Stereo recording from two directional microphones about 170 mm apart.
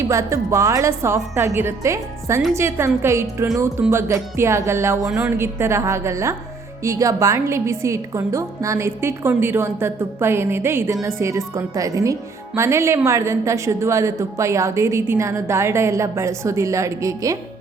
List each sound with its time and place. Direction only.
0.0 s a woman's voice: 15° right (ahead or behind)